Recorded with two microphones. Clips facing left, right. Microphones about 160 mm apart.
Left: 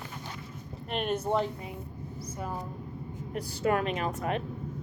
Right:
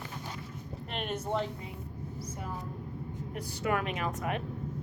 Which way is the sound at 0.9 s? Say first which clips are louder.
Left 6 dB; 40° left (ahead or behind).